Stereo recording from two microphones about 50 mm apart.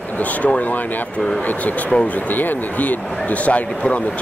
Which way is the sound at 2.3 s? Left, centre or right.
Left.